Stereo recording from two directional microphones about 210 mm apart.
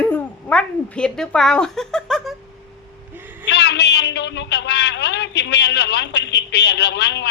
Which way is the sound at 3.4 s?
55° left (ahead or behind).